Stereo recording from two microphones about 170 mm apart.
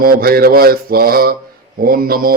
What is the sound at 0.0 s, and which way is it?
Speech, 60° right (ahead or behind).